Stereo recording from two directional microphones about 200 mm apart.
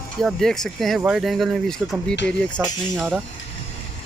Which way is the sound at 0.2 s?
Centre (ahead or behind).